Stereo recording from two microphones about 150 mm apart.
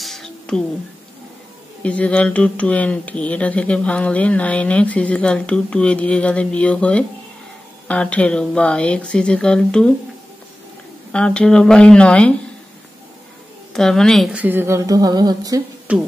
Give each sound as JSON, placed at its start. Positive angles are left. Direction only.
{"t": 0.0, "sound": "a sound", "side_deg": 0}
{"t": 1.8, "sound": "speech", "side_deg": 10}
{"t": 11.1, "sound": "speech", "side_deg": 5}
{"t": 13.7, "sound": "a woman's voice", "side_deg": 5}
{"t": 14.3, "sound": "speech", "side_deg": -10}
{"t": 15.9, "sound": "speech", "side_deg": -5}